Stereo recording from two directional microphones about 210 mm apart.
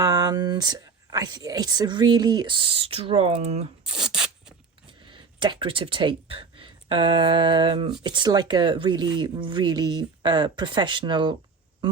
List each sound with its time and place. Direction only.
0.0 s speech: 20° right (ahead or behind)
3.9 s a sound: 5° right (ahead or behind)
5.1 s speech: 20° right (ahead or behind)